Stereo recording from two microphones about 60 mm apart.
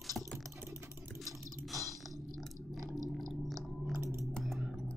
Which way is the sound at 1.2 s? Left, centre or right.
Right.